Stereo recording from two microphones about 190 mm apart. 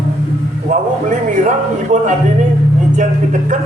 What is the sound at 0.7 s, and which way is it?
Speech, 40° right (ahead or behind).